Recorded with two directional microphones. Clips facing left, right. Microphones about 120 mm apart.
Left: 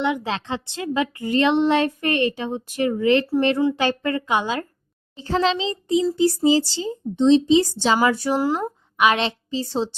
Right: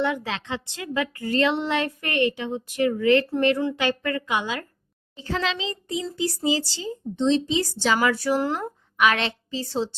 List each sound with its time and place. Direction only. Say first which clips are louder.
0.0 s speech: left 2 dB; 15° left (ahead or behind)
0.3 s a woman's voice: left 4 dB; 30° left (ahead or behind)
8.4 s speech: left 4 dB; 10° left (ahead or behind)
8.6 s a woman's voice: left 3 dB; 20° left (ahead or behind)